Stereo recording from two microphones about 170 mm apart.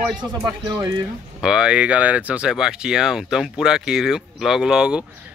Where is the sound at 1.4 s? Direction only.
5° right (ahead or behind).